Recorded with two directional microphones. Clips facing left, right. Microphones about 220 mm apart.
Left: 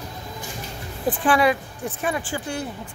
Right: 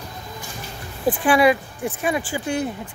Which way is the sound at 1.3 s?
10° right (ahead or behind).